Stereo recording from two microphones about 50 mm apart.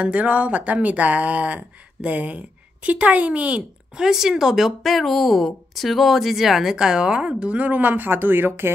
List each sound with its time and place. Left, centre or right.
0.0 s speech: right
4.0 s speech: centre; by 8.7 s right